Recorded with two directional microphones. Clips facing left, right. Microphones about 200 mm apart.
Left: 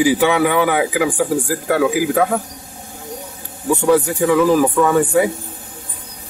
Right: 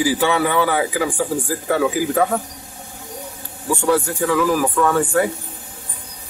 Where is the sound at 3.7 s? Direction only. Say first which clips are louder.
Left 4 dB; 15° left (ahead or behind).